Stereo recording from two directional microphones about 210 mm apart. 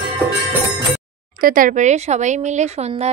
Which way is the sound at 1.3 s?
40° right (ahead or behind).